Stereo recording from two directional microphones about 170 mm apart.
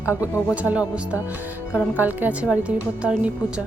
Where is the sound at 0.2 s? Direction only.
10° right (ahead or behind).